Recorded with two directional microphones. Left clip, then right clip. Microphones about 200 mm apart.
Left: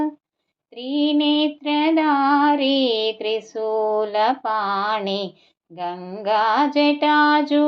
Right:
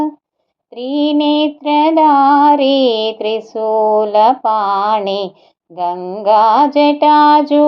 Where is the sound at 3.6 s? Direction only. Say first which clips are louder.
Right 9 dB; 35° right (ahead or behind).